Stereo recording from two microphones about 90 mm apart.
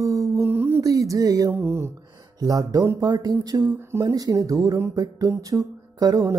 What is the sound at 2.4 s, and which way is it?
Speech, 45° right (ahead or behind).